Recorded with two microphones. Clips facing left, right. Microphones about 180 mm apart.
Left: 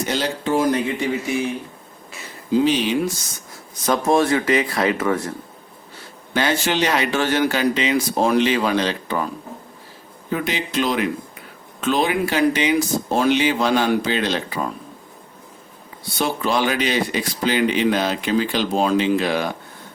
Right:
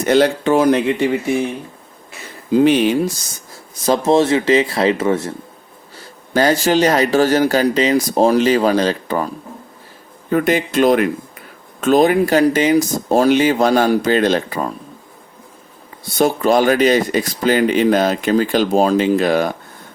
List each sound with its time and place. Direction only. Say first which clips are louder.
0.0 s speech: right 9 dB; 60° right (ahead or behind)
2.5 s speech: right 5 dB; 55° right (ahead or behind)
3.8 s speech: right 4 dB; 25° right (ahead or behind)
6.3 s speech: right 6 dB; 40° right (ahead or behind)
10.2 s speech: right 8 dB; 50° right (ahead or behind)
16.1 s speech: right 7 dB; 45° right (ahead or behind)